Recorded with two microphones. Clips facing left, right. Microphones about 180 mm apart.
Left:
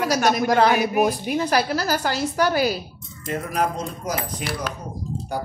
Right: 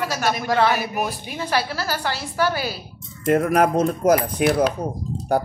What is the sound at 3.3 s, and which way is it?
Speech, 60° right (ahead or behind).